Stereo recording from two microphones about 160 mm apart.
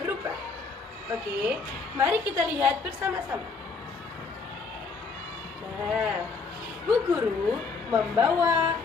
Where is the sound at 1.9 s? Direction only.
15° right (ahead or behind).